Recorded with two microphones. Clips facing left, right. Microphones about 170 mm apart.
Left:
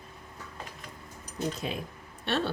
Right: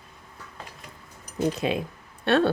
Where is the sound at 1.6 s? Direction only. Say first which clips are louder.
Right 8 dB; 80° right.